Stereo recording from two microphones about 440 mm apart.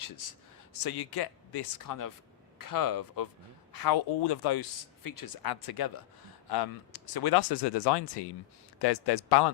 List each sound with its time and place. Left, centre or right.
0.0 s speech: left
0.8 s speech: left
5.0 s speech: left